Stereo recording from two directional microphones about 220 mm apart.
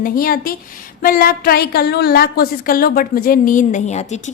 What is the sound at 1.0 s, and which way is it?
A woman's voice, 40° left (ahead or behind).